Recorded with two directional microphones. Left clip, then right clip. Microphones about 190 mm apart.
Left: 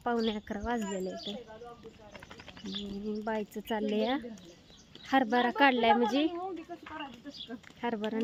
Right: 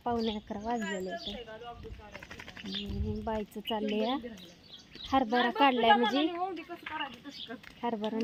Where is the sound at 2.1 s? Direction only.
45° right (ahead or behind).